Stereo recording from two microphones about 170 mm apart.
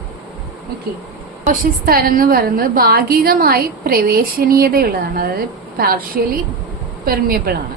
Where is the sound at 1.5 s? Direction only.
60° right (ahead or behind).